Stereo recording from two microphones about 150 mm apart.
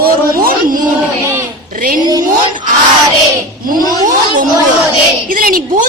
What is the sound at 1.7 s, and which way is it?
Speech, 65° right (ahead or behind).